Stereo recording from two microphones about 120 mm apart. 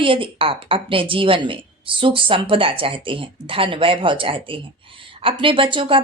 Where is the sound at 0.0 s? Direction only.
45° right (ahead or behind).